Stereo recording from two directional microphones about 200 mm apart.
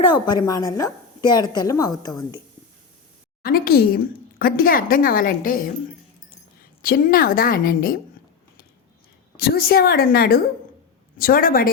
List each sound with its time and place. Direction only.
0.0 s a woman's voice: 20° left (ahead or behind)
3.4 s speech: 50° left (ahead or behind)
6.8 s speech: 45° left (ahead or behind)
9.4 s speech: 50° left (ahead or behind)